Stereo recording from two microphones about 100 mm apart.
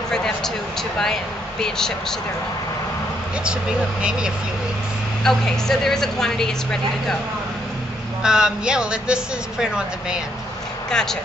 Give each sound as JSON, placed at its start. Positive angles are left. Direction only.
{"t": 0.1, "sound": "speech", "side_deg": 5}
{"t": 5.2, "sound": "speech", "side_deg": 5}
{"t": 8.2, "sound": "speech", "side_deg": -5}
{"t": 10.9, "sound": "speech", "side_deg": 5}